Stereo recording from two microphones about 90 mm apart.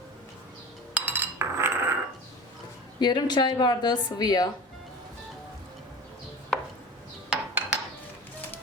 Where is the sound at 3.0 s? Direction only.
55° left (ahead or behind).